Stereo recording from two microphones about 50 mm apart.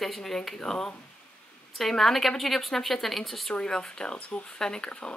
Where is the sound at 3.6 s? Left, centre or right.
Centre.